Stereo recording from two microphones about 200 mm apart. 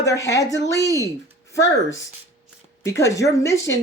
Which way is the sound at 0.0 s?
15° left (ahead or behind).